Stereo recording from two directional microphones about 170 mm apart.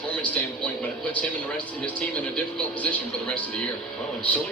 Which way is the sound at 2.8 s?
10° left (ahead or behind).